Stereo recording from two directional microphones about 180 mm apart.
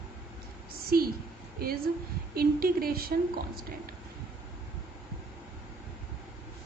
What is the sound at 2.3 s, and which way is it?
A woman's voice, 55° right (ahead or behind).